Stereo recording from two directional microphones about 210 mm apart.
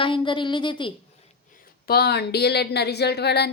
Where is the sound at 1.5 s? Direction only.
45° left (ahead or behind).